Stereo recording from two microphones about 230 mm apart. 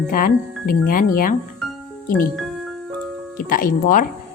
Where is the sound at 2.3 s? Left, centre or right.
Centre.